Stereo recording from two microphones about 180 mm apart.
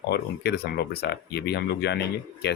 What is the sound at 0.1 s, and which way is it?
Speech, 60° left (ahead or behind).